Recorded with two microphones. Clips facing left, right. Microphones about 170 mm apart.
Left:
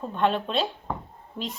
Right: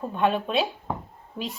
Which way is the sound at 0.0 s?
10° right (ahead or behind).